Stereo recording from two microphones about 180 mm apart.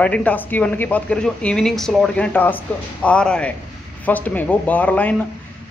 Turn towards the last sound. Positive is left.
turn(degrees=10)  # may be behind; listen again after turning